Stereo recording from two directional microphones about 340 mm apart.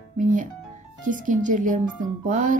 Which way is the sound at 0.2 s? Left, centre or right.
Right.